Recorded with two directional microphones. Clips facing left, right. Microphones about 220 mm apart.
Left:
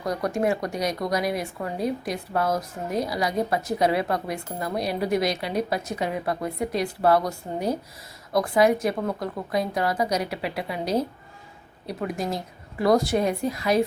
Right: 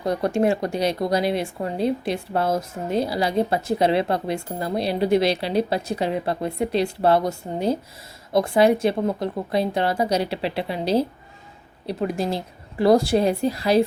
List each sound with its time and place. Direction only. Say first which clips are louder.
0.0 s a woman's voice: right 4 dB; 30° right (ahead or behind)